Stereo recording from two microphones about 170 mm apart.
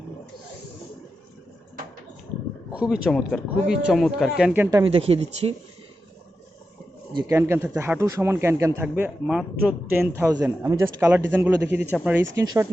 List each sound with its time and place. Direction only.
2.7 s speech: 5° right (ahead or behind)
4.8 s speech: 35° right (ahead or behind)
7.1 s speech: 25° right (ahead or behind)
7.3 s speech: 15° right (ahead or behind)
12.4 s speech: 20° right (ahead or behind)